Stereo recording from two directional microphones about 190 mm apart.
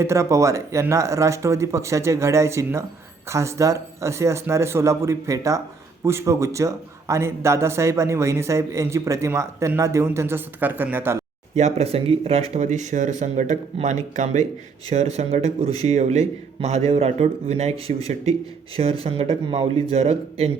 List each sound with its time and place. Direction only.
0.0 s a man's voice: 15° right (ahead or behind)
11.5 s speech: 35° right (ahead or behind)